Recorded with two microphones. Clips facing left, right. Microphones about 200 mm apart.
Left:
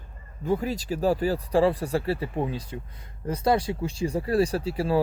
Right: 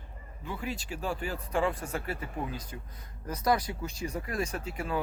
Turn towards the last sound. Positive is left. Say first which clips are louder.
# left 9 dB
turn(degrees=35)  # may be behind; listen again after turning